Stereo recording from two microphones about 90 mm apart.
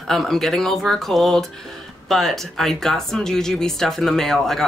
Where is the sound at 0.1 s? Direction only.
5° left (ahead or behind).